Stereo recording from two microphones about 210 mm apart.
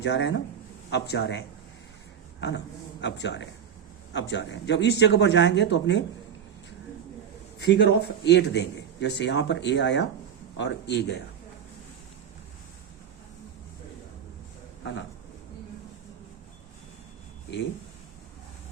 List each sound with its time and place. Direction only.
0.0 s speech: 55° left (ahead or behind)
3.0 s speech: 55° left (ahead or behind)
7.6 s speech: 55° left (ahead or behind)